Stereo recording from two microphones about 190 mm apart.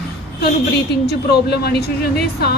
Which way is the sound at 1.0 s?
55° left (ahead or behind).